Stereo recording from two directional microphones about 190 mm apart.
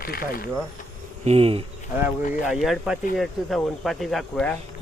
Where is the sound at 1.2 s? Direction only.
30° right (ahead or behind).